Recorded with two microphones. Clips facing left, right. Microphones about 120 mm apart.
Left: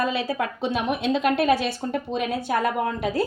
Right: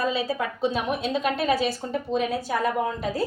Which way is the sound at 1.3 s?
70° left (ahead or behind).